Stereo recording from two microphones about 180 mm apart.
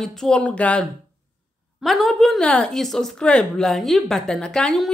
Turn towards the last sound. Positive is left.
turn(degrees=0)  # may be behind; listen again after turning